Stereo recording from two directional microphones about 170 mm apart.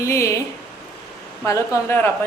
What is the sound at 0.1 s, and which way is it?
Speech, 15° left (ahead or behind).